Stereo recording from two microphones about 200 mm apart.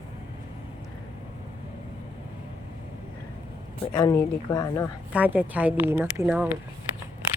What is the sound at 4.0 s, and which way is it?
Speech, 20° left (ahead or behind).